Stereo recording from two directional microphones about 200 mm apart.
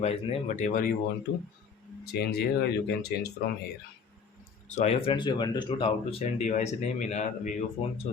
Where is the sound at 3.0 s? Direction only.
55° left (ahead or behind).